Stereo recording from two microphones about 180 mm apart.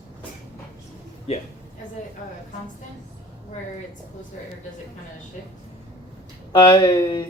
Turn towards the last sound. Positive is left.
turn(degrees=25)  # may be behind; listen again after turning